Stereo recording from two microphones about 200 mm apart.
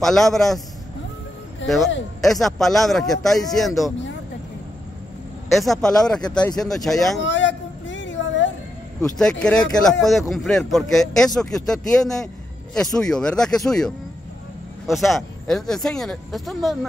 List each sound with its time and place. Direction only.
0.0 s speech: centre (ahead or behind)
2.2 s speech: centre (ahead or behind)
5.6 s speech: centre (ahead or behind)
7.2 s a sound: 65° left (ahead or behind)
9.2 s speech: 5° left (ahead or behind)